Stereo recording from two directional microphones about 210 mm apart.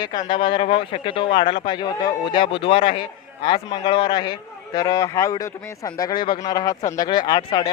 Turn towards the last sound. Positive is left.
turn(degrees=20)  # may be behind; listen again after turning